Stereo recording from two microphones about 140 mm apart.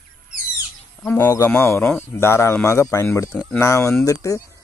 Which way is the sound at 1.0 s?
15° left (ahead or behind).